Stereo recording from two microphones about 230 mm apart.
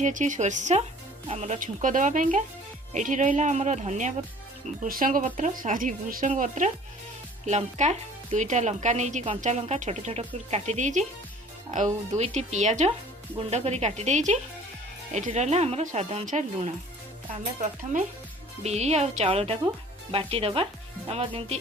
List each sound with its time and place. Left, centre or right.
0.0 s speech: right
12.1 s speech: right
18.6 s speech: right